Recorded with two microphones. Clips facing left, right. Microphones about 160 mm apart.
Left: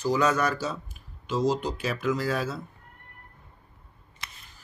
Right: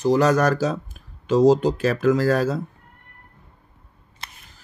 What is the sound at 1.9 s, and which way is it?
Speech, 80° right.